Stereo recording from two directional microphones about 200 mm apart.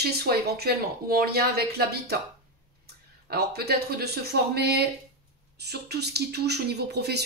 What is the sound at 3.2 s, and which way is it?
Speech, 50° right (ahead or behind).